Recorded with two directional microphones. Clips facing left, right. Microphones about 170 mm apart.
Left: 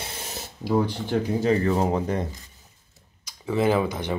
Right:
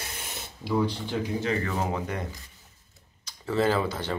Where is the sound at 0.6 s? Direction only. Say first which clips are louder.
Left 3 dB; 45° left (ahead or behind).